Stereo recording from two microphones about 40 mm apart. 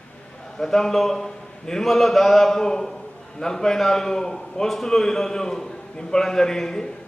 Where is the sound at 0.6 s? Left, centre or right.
Centre.